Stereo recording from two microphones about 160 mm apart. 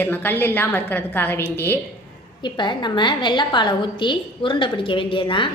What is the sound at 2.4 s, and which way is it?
A woman's voice, 30° left (ahead or behind).